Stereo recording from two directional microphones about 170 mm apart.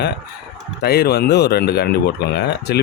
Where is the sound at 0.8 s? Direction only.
65° left (ahead or behind).